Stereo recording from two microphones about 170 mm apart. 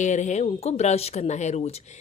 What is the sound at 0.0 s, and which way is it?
Speech, 45° left (ahead or behind).